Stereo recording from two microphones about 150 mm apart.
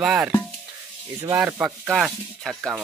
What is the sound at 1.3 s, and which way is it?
Speech, 10° right (ahead or behind).